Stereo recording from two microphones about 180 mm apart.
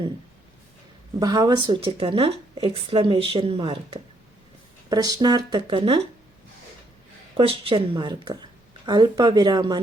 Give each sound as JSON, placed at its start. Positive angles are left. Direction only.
{"t": 1.2, "sound": "speech", "side_deg": -25}
{"t": 7.3, "sound": "speech", "side_deg": -30}